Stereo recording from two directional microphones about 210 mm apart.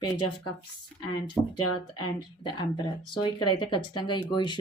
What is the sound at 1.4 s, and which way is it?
Speech, 5° left (ahead or behind).